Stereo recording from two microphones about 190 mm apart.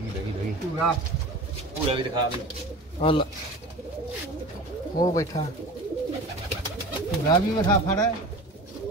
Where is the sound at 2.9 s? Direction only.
25° left (ahead or behind).